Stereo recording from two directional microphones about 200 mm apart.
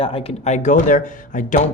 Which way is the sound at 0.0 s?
30° left (ahead or behind).